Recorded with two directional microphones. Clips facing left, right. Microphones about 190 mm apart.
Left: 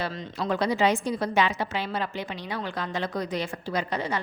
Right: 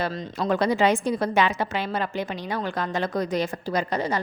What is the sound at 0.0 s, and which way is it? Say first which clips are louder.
A woman's voice: right 4 dB; 45° right (ahead or behind).